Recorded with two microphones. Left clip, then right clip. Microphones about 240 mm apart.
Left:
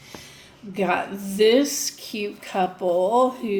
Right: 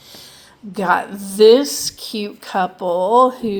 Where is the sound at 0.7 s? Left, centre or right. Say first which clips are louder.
Right 6 dB; right.